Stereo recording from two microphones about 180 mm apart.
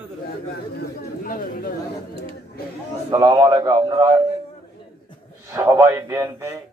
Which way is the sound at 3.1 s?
20° right (ahead or behind).